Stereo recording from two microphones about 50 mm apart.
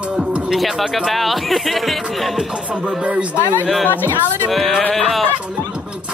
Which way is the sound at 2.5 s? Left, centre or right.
Right.